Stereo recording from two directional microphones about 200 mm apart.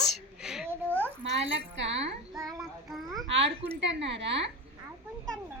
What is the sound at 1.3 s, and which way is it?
Speech, 65° right (ahead or behind).